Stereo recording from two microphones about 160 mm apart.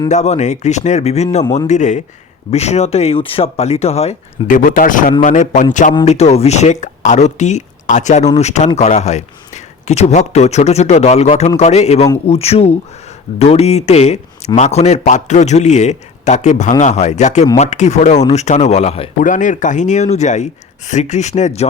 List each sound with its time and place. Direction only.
0.1 s speech: 45° left (ahead or behind)
4.4 s speech: 60° left (ahead or behind); by 19.1 s 40° left (ahead or behind)
19.2 s speech: 55° left (ahead or behind)